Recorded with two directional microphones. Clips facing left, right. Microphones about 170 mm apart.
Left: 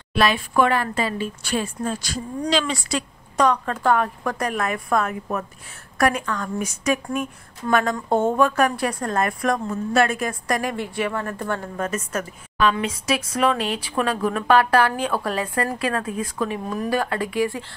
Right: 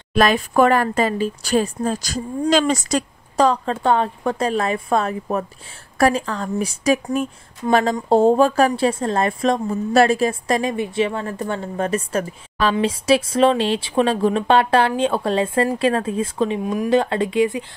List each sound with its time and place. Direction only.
0.1 s a woman's voice: 45° right (ahead or behind); by 11.7 s 20° right (ahead or behind)
11.7 s a woman's voice: 30° right (ahead or behind)